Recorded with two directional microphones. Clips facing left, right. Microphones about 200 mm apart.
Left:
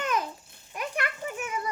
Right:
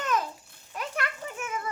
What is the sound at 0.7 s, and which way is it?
Children playing, 15° left (ahead or behind).